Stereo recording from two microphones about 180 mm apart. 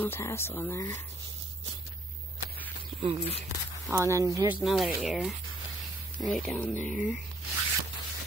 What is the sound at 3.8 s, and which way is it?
Speech, 15° right (ahead or behind).